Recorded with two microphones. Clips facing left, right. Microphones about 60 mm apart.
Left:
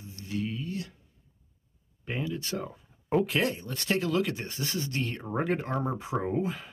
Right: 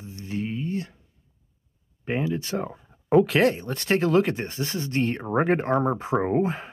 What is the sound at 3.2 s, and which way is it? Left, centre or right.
Speech, right.